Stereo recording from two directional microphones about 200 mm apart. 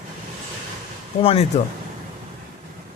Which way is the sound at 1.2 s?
30° left (ahead or behind).